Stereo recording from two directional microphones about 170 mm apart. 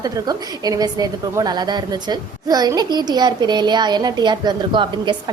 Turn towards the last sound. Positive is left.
turn(degrees=-25)  # may be behind; listen again after turning